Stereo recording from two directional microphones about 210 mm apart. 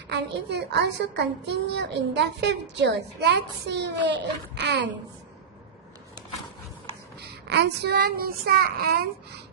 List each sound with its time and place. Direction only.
0.1 s a woman's voice: 55° right (ahead or behind)
7.2 s child singing: 55° right (ahead or behind)